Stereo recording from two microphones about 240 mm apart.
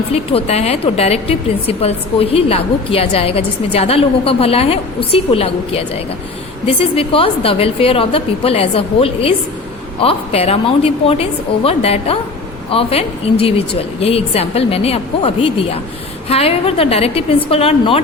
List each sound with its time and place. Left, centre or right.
0.1 s a woman's voice: left